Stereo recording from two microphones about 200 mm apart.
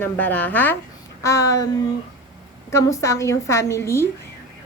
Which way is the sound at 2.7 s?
15° left (ahead or behind).